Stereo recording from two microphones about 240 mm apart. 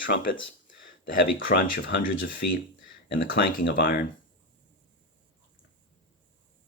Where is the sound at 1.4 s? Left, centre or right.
Left.